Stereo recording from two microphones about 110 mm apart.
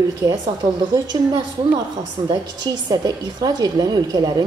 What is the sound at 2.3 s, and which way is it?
A woman's voice, 40° right (ahead or behind).